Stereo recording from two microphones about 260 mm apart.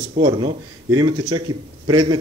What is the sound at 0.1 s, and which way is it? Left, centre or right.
Speech, right.